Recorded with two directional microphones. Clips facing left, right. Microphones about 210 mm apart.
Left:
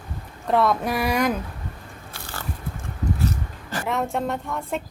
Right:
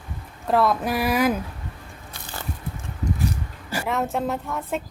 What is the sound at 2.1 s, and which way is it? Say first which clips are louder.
Biting: even; 20° right (ahead or behind).